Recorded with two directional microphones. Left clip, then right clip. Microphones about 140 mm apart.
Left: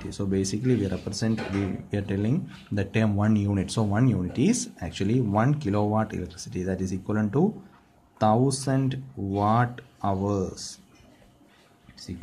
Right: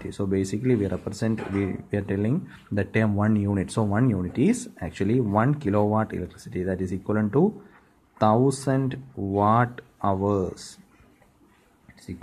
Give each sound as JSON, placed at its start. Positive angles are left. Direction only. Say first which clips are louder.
{"t": 0.0, "sound": "speech", "louder": "right 2 dB", "side_deg": -40}